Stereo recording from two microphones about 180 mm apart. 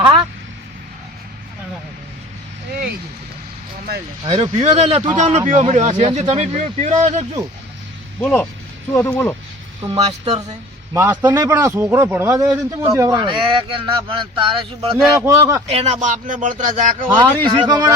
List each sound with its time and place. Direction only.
4.3 s speech: 35° right (ahead or behind)
8.2 s speech: 5° left (ahead or behind)
9.9 s speech: 35° right (ahead or behind)
10.3 s a man's voice: 25° right (ahead or behind)
11.0 s a man's voice: 10° right (ahead or behind); by 14.9 s 30° right (ahead or behind)
15.1 s a man's voice: 15° right (ahead or behind)
15.6 s speech: 35° right (ahead or behind)
17.4 s a man's voice: 25° right (ahead or behind)